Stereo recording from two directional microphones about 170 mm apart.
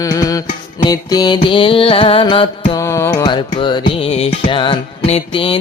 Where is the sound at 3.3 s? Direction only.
30° left (ahead or behind).